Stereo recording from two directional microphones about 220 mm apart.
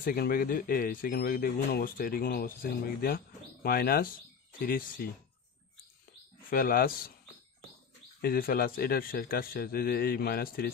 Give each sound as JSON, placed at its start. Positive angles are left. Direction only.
{"t": 0.0, "sound": "speech", "side_deg": 40}
{"t": 6.5, "sound": "speech", "side_deg": 40}
{"t": 8.2, "sound": "speech", "side_deg": 40}